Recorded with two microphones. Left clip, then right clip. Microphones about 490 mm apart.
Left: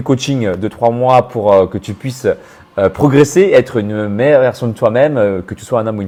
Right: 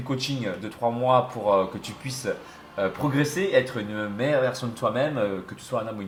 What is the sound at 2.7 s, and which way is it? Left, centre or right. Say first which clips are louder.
Speech: left 15 dB; left.